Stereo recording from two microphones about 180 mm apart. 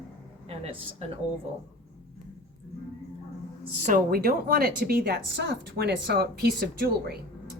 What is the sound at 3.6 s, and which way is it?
A woman's voice, 45° right (ahead or behind).